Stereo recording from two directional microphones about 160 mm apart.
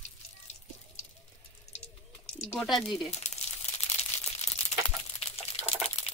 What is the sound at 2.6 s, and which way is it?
Speech, centre (ahead or behind).